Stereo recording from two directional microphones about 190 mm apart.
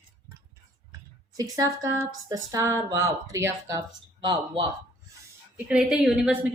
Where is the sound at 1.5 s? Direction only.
15° right (ahead or behind).